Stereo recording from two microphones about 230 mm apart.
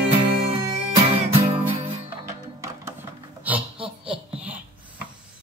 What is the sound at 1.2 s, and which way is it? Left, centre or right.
Music, right.